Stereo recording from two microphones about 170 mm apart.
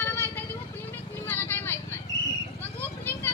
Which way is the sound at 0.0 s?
10° left (ahead or behind).